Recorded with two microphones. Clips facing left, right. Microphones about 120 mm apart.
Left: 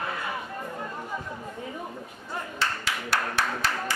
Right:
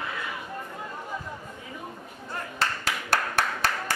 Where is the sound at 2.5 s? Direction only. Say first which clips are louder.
Right 2 dB; 45° right (ahead or behind).